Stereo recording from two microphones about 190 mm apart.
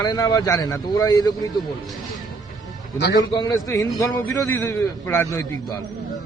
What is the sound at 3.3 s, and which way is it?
A man's voice, 20° left (ahead or behind).